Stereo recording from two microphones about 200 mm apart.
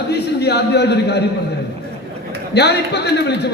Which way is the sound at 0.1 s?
55° left (ahead or behind).